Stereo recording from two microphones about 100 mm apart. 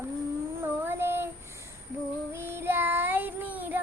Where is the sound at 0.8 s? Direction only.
25° right (ahead or behind).